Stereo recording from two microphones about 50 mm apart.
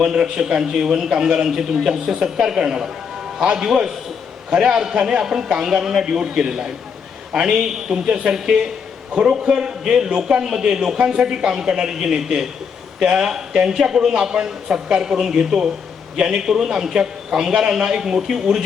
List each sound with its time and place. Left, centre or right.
0.0 s a man's voice: centre